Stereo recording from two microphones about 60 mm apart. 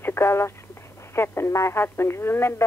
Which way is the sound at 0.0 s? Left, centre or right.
Left.